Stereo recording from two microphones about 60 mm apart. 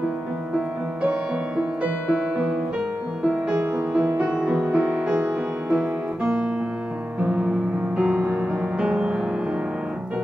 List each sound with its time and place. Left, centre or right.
1.6 s music: centre